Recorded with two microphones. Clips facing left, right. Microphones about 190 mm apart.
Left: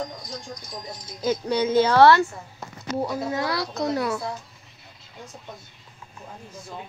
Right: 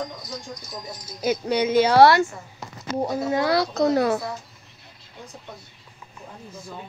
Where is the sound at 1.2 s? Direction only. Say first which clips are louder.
Right 1 dB; 15° right (ahead or behind).